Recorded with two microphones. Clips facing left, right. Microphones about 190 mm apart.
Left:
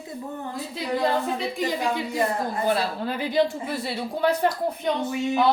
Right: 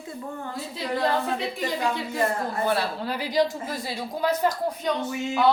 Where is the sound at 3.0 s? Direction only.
50° left (ahead or behind).